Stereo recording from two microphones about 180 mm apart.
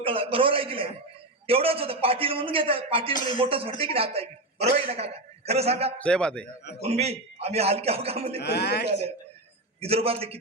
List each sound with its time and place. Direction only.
0.0 s a man's voice: 30° right (ahead or behind)
6.0 s a man's voice: 5° left (ahead or behind)
6.7 s a man's voice: 35° right (ahead or behind)
8.4 s a man's voice: 65° left (ahead or behind)
9.8 s a man's voice: 35° right (ahead or behind)